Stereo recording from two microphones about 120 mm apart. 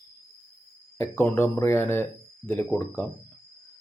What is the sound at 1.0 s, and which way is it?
Speech, 20° left (ahead or behind).